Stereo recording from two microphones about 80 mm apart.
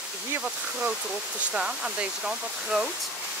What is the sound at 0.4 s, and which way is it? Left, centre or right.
Speech, centre.